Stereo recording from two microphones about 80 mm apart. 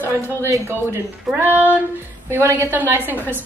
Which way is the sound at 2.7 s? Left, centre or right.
Right.